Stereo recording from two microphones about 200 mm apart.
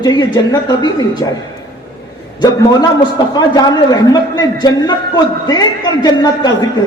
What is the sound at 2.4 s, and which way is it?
Speech, 20° left (ahead or behind).